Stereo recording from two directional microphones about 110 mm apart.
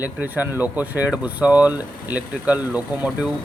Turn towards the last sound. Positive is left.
turn(degrees=-10)  # may be behind; listen again after turning